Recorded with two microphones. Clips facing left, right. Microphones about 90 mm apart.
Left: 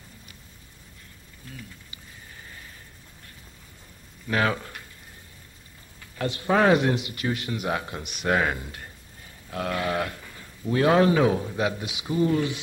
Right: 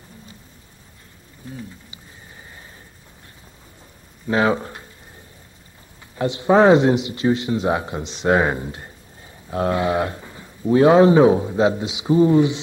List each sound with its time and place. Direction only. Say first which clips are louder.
1.4 s speech: right 8 dB; 25° right (ahead or behind)
4.3 s speech: right 6 dB; 25° right (ahead or behind)
6.1 s speech: right 7 dB; 20° right (ahead or behind)